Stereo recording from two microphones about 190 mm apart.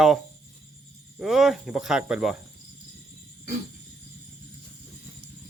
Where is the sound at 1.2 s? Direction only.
Centre (ahead or behind).